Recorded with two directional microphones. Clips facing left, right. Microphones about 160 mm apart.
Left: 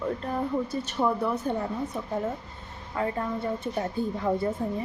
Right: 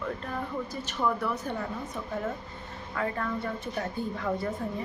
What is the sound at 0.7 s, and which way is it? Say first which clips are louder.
Speech: left 3 dB; 25° left (ahead or behind).